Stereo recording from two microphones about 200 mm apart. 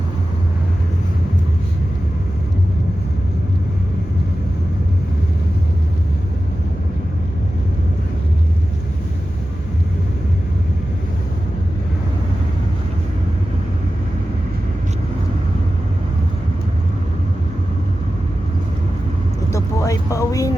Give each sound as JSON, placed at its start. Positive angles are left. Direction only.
{"t": 19.5, "sound": "vehicle", "side_deg": 15}